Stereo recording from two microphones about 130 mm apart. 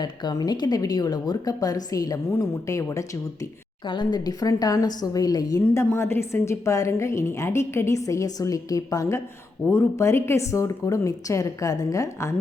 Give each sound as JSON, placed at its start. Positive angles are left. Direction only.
{"t": 0.0, "sound": "a woman's voice", "side_deg": 35}
{"t": 3.8, "sound": "a woman's voice", "side_deg": 35}
{"t": 5.6, "sound": "a woman's voice", "side_deg": 20}